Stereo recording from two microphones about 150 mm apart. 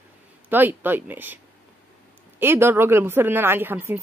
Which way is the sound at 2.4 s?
15° right (ahead or behind).